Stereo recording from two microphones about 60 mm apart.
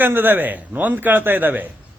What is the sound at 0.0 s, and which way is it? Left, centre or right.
Speech, right.